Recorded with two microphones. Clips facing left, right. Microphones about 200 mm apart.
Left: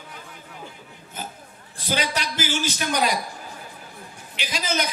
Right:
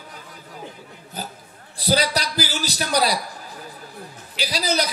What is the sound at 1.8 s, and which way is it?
A man's voice, 35° right (ahead or behind).